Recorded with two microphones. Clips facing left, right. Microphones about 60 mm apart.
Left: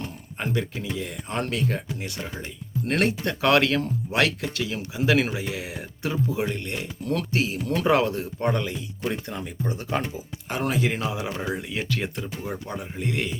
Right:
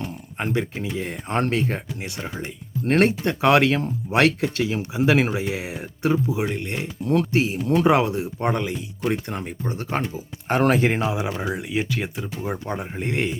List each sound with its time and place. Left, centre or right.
0.3 s speech: right
2.0 s speech: right
6.2 s speech: centre
9.2 s speech: right
10.8 s speech: right
11.1 s speech: centre
12.4 s speech: right